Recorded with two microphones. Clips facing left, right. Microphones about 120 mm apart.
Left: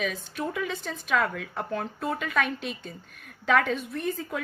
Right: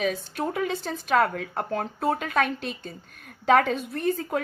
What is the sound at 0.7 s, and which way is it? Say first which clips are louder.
Speech: right 4 dB; 35° right (ahead or behind).